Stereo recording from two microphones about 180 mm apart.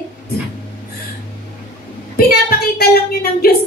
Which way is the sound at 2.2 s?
60° left (ahead or behind).